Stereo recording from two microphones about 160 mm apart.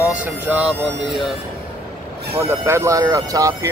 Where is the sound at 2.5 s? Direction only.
15° right (ahead or behind).